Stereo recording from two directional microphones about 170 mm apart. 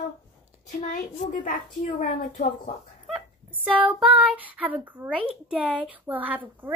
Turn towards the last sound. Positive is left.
turn(degrees=-10)  # may be behind; listen again after turning